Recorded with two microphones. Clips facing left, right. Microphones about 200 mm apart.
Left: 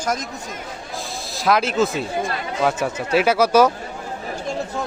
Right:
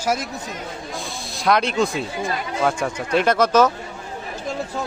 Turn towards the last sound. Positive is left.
turn(degrees=10)  # may be behind; listen again after turning